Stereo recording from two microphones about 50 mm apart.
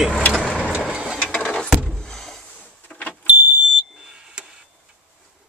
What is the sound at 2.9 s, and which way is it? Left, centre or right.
Vehicle, left.